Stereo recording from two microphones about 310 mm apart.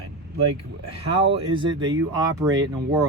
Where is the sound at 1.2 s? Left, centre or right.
Centre.